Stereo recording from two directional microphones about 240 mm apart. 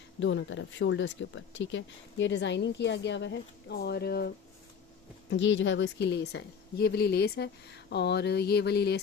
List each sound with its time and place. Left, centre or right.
0.2 s speech: left
5.3 s speech: left